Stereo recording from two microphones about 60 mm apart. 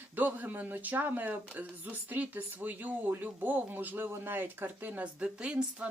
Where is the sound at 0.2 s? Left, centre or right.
Right.